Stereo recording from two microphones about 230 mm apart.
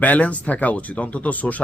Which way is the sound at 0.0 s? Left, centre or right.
Centre.